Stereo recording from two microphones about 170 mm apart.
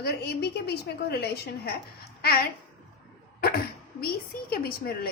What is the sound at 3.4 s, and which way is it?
Speech, 60° left (ahead or behind).